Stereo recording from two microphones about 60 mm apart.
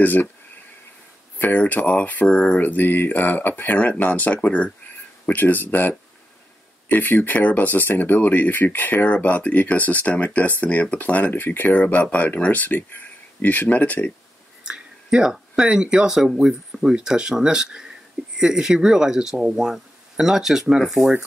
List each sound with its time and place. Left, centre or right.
0.0 s speech: left
1.4 s speech: left
2.2 s speech: centre
2.6 s speech: left
14.6 s speech: centre